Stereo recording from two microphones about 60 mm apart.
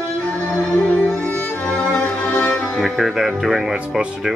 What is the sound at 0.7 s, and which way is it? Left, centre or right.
Music, left.